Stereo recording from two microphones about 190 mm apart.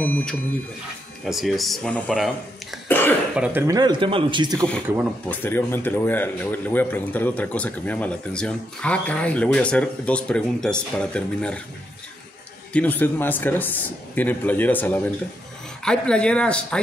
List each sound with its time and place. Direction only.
0.0 s speech: 5° left (ahead or behind)
2.9 s cough: 10° left (ahead or behind)
3.3 s speech: 5° right (ahead or behind)
3.6 s speech: 20° right (ahead or behind)
5.3 s speech: 10° left (ahead or behind)
12.7 s speech: 10° left (ahead or behind)